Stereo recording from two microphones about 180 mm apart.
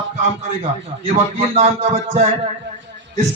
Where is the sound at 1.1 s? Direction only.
35° right (ahead or behind).